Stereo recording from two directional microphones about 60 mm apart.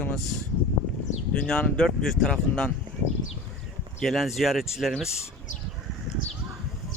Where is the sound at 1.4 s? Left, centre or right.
Centre.